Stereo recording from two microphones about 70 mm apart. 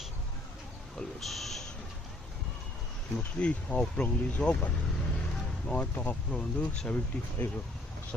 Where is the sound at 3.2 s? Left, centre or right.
Centre.